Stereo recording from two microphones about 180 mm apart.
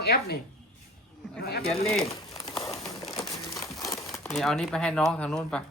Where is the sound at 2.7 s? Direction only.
Centre (ahead or behind).